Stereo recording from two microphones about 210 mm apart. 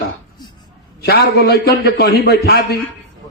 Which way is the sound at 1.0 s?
50° left (ahead or behind).